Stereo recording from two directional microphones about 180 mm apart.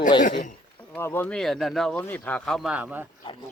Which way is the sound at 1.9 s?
15° left (ahead or behind).